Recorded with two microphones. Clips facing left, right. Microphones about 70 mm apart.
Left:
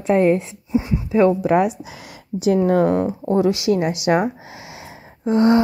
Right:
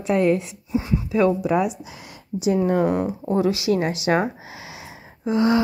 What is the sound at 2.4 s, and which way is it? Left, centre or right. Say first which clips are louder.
Speech: left 3 dB; left.